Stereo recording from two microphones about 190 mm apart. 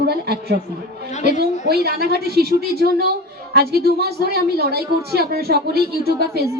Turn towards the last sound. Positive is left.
turn(degrees=-55)  # may be behind; listen again after turning